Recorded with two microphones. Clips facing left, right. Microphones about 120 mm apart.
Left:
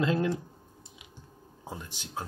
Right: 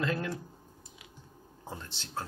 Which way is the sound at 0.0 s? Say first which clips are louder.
Left 5 dB; 20° left (ahead or behind).